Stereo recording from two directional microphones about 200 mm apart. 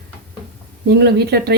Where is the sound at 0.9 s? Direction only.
55° right (ahead or behind).